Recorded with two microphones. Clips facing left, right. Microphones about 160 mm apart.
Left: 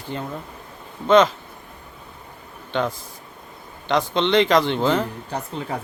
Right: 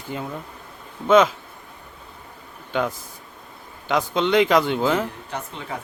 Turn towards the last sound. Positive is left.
turn(degrees=35)  # may be behind; listen again after turning